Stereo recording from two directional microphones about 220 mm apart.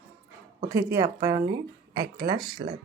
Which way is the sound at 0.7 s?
15° right (ahead or behind).